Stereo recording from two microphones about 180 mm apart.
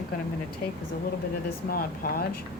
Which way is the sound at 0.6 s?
60° left (ahead or behind).